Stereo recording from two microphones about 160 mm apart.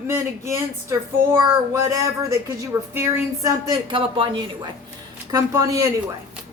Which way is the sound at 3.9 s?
30° right (ahead or behind).